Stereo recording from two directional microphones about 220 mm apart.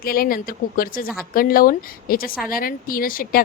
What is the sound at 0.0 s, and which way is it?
Speech, 40° left (ahead or behind).